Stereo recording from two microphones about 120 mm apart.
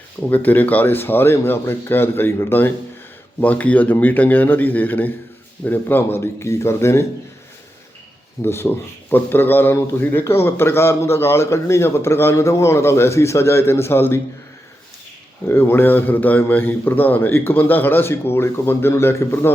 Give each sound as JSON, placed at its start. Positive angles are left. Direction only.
{"t": 0.2, "sound": "a man's voice", "side_deg": 15}
{"t": 8.4, "sound": "a man's voice", "side_deg": 20}
{"t": 15.4, "sound": "a man's voice", "side_deg": 20}